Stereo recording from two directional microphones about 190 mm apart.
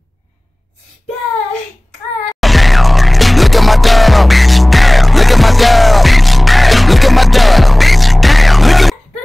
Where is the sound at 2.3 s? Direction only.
Centre (ahead or behind).